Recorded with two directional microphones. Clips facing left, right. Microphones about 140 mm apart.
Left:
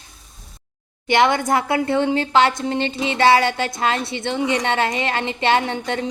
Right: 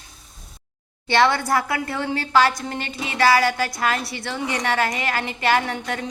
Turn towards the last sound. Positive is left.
turn(degrees=25)  # may be behind; listen again after turning